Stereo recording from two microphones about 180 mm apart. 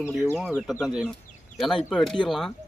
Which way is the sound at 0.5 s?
5° left (ahead or behind).